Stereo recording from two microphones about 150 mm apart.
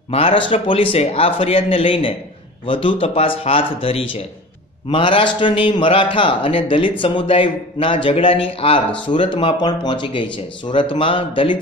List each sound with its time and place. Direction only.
0.1 s a man's voice: 40° left (ahead or behind)